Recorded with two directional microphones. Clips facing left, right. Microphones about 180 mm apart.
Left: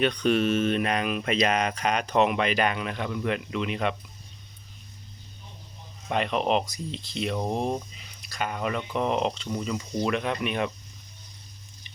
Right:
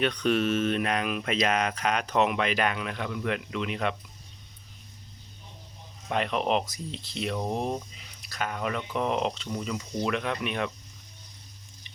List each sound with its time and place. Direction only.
0.0 s speech: centre (ahead or behind)
6.1 s speech: centre (ahead or behind)
7.3 s speech: 30° left (ahead or behind)
8.2 s speech: centre (ahead or behind)